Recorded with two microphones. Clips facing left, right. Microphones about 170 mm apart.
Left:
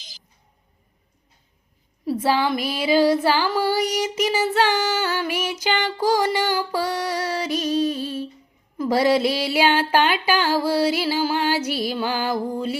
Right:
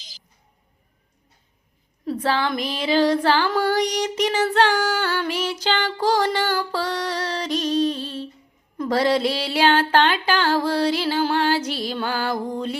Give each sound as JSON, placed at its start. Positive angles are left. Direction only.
{"t": 2.0, "sound": "child singing", "side_deg": 10}